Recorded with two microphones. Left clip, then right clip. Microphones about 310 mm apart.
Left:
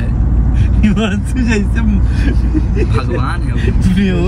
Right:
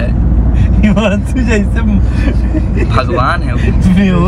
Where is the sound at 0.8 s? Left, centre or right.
Centre.